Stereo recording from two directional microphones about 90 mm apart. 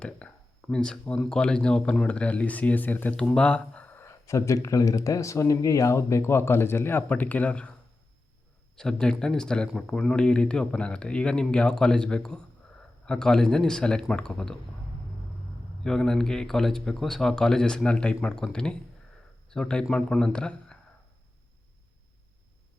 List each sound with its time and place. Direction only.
0.0 s speech: 10° left (ahead or behind)
4.0 s speech: 35° left (ahead or behind); by 7.7 s 15° left (ahead or behind)
8.7 s speech: 5° left (ahead or behind)
15.8 s speech: 5° left (ahead or behind)